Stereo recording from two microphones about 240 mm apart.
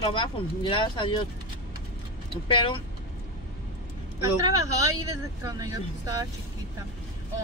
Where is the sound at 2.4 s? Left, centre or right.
Left.